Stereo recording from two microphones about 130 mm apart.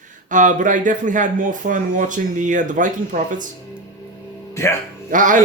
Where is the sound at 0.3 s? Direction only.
75° right (ahead or behind).